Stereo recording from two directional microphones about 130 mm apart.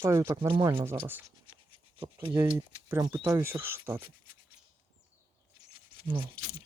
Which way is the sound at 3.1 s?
20° right (ahead or behind).